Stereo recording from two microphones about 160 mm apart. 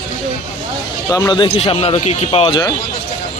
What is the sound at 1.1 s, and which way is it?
Speech, 25° left (ahead or behind).